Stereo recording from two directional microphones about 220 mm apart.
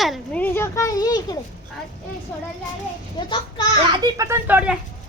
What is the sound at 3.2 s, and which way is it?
Speech, 20° left (ahead or behind).